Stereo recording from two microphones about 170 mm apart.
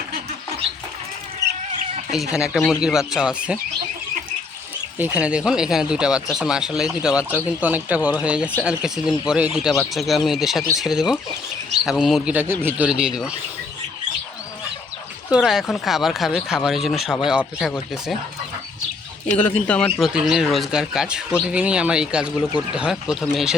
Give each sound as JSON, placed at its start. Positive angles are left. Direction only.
{"t": 1.4, "sound": "a sound", "side_deg": -15}
{"t": 2.3, "sound": "speech", "side_deg": -5}
{"t": 4.9, "sound": "speech", "side_deg": -10}
{"t": 15.3, "sound": "speech", "side_deg": 0}
{"t": 19.4, "sound": "speech", "side_deg": 10}
{"t": 20.1, "sound": "speech", "side_deg": -5}